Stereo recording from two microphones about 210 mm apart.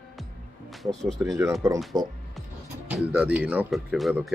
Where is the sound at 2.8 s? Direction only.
5° right (ahead or behind).